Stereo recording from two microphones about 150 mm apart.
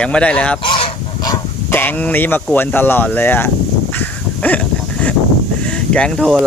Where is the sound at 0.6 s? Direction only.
35° left (ahead or behind).